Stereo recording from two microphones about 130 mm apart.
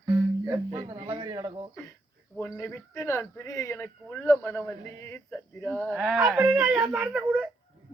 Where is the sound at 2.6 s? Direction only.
20° left (ahead or behind).